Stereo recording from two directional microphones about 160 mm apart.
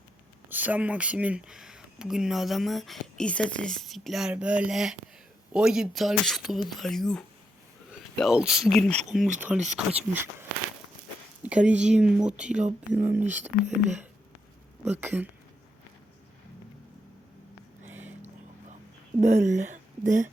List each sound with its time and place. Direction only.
0.5 s speech: 10° right (ahead or behind)
11.4 s speech: 10° right (ahead or behind)
13.2 s speech: 45° right (ahead or behind)
15.0 s speech: 10° right (ahead or behind)
17.8 s a sound: 10° right (ahead or behind)
19.2 s speech: 45° right (ahead or behind)